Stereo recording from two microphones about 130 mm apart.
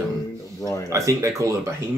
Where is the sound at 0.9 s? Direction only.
25° right (ahead or behind).